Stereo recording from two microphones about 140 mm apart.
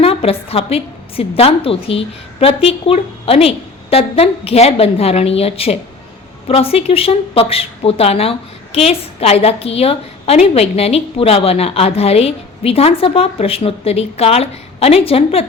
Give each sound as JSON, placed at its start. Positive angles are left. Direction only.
{"t": 0.0, "sound": "a woman's voice", "side_deg": 45}